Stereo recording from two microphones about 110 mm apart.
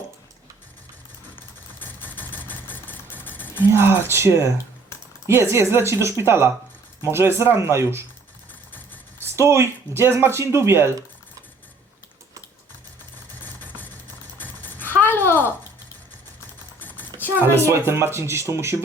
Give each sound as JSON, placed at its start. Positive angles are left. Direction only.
{"t": 1.8, "sound": "vehicle", "side_deg": 15}
{"t": 3.7, "sound": "speech", "side_deg": -20}
{"t": 9.2, "sound": "speech", "side_deg": -25}
{"t": 13.4, "sound": "vehicle", "side_deg": 15}
{"t": 14.3, "sound": "a sound", "side_deg": 15}
{"t": 17.2, "sound": "a sound", "side_deg": -20}
{"t": 17.7, "sound": "speech", "side_deg": -25}